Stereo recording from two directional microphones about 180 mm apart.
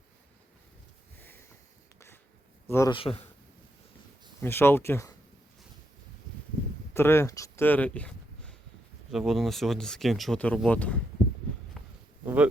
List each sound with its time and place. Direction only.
1.2 s sniff: 10° left (ahead or behind)
2.6 s a man's voice: 15° left (ahead or behind)
2.9 s a man's voice: 30° left (ahead or behind)
4.4 s speech: 15° left (ahead or behind)
6.9 s speech: 15° left (ahead or behind)
11.8 s a sound: centre (ahead or behind)
12.2 s a sound: 10° right (ahead or behind)